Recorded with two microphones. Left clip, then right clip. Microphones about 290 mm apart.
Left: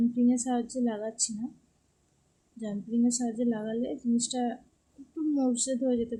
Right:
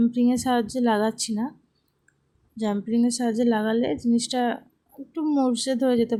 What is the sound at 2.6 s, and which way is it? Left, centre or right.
Speech, right.